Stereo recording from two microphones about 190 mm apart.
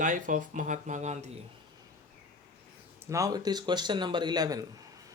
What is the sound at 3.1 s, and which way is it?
Speech, 20° right (ahead or behind).